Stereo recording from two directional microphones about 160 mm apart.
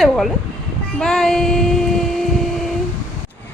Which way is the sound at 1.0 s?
5° left (ahead or behind).